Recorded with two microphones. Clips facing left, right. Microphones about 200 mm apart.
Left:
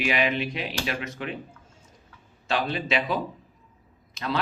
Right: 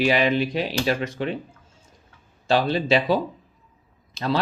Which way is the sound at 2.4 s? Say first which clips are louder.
Right 6 dB; 35° right (ahead or behind).